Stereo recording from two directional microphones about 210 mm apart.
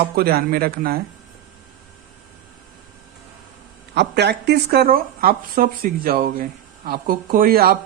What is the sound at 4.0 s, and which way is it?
A man's voice, 55° right (ahead or behind).